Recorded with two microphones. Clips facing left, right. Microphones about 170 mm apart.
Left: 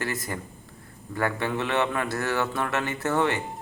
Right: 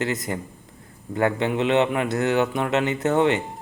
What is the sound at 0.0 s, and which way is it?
Speech, 20° right (ahead or behind).